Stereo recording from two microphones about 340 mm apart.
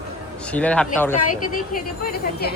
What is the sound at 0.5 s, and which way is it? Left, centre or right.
Speech, centre.